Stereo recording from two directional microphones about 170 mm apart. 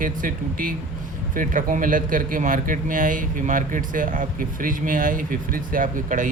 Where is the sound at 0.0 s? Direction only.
55° right (ahead or behind).